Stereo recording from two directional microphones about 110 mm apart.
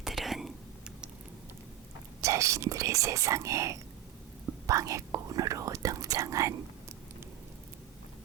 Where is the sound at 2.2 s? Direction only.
30° right (ahead or behind).